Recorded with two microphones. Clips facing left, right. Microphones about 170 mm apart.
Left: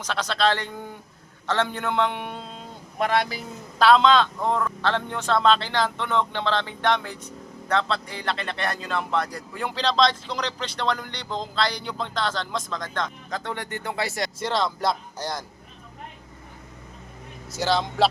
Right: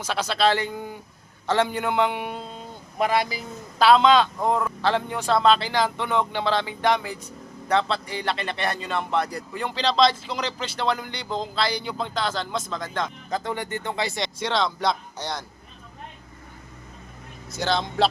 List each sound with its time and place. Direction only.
0.0 s a man's voice: 5° right (ahead or behind)
17.5 s speech: 5° left (ahead or behind)